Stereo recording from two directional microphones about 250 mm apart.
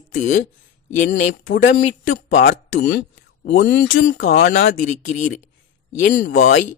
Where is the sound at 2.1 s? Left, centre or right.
Left.